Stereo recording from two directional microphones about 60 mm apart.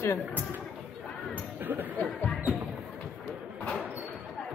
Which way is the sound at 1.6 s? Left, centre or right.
Right.